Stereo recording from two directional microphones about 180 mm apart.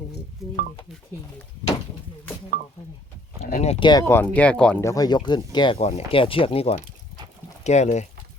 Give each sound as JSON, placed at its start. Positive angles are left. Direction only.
{"t": 0.4, "sound": "a sound", "side_deg": 0}
{"t": 3.4, "sound": "speech", "side_deg": 40}
{"t": 4.0, "sound": "speech", "side_deg": 10}
{"t": 4.8, "sound": "speech", "side_deg": 20}